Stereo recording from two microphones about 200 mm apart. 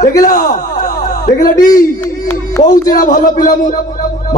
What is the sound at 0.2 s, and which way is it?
Speech, 40° left (ahead or behind).